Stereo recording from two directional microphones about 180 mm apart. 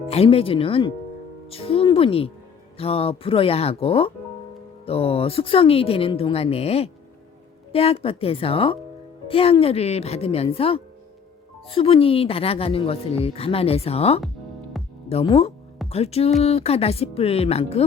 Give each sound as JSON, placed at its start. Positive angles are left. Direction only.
{"t": 0.1, "sound": "a woman's voice", "side_deg": 35}
{"t": 14.8, "sound": "music", "side_deg": 0}
{"t": 15.1, "sound": "a woman's voice", "side_deg": 30}